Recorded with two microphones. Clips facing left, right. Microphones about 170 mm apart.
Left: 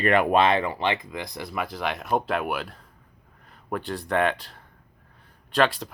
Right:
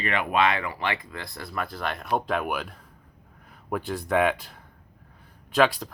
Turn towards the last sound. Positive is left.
turn(degrees=0)  # may be behind; listen again after turning